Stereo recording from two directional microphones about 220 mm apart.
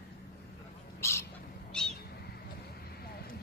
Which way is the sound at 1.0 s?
10° left (ahead or behind).